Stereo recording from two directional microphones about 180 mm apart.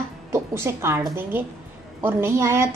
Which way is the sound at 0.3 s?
15° right (ahead or behind).